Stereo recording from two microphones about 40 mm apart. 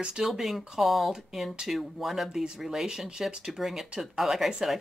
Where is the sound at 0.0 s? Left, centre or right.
Centre.